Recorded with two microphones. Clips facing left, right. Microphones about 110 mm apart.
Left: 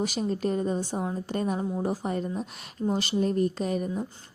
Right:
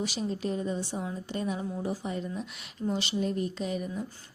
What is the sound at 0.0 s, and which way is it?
A woman's voice, 45° left (ahead or behind).